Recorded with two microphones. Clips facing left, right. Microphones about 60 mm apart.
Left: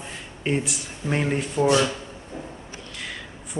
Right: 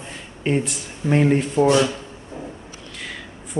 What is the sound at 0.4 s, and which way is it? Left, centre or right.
A man's voice, centre.